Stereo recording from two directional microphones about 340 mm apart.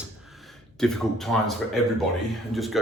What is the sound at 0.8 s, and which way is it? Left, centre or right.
Speech, centre.